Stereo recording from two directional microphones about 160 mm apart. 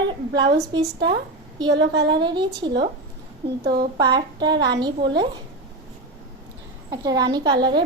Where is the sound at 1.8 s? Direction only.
90° right.